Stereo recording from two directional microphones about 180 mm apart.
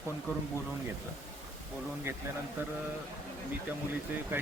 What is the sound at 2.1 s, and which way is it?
Speech, 10° right (ahead or behind).